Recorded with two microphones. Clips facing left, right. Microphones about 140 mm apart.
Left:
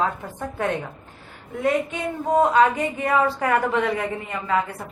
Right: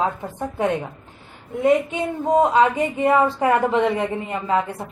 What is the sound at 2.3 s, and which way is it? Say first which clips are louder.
A woman's voice: right 1 dB; 20° right (ahead or behind).